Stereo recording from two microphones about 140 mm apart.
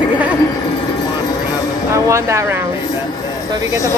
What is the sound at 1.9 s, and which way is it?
Speech, 20° right (ahead or behind).